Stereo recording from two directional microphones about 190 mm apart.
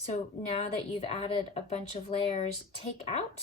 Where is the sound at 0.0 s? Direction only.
35° left (ahead or behind).